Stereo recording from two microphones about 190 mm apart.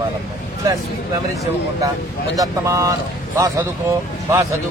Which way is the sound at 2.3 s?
15° right (ahead or behind).